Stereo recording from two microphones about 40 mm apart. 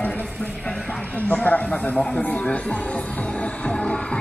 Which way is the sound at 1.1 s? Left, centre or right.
Left.